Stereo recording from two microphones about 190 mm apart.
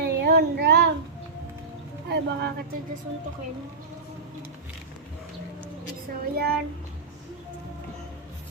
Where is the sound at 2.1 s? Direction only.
60° right (ahead or behind).